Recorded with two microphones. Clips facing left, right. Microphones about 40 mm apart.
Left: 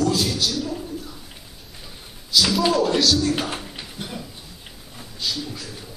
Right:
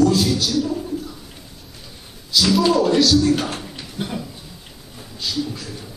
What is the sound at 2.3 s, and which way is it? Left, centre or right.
Speech, centre.